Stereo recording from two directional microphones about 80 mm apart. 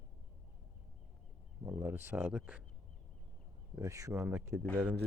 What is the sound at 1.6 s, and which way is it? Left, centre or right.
Speech, right.